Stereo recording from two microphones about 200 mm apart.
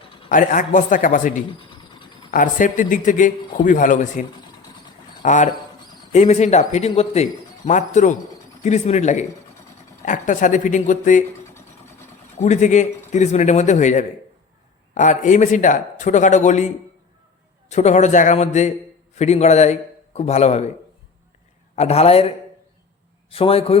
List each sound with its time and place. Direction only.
0.3 s a man's voice: 40° left (ahead or behind)
1.5 s a sound: 25° left (ahead or behind)
2.3 s a man's voice: 40° left (ahead or behind)
12.4 s a man's voice: 35° left (ahead or behind)
21.8 s a man's voice: 30° left (ahead or behind)
23.3 s a man's voice: 30° left (ahead or behind)